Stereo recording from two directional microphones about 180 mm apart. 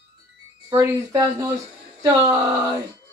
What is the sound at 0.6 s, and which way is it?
Speech, 20° right (ahead or behind).